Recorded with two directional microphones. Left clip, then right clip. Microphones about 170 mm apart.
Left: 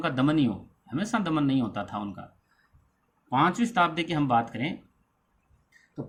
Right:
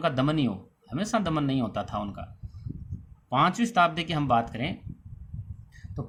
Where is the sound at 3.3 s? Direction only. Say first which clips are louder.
Right 1 dB; 40° right (ahead or behind).